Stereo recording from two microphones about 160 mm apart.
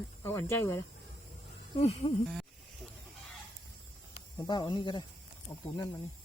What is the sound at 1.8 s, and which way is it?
Speech, 45° left (ahead or behind).